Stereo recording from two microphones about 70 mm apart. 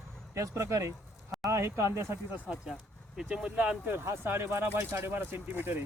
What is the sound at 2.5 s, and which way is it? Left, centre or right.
Speech, centre.